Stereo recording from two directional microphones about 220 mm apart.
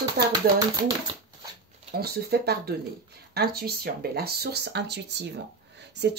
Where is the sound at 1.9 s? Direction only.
45° right (ahead or behind).